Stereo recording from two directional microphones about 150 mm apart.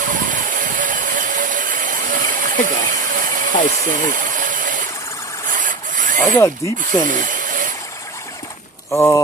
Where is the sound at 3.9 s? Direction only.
60° right (ahead or behind).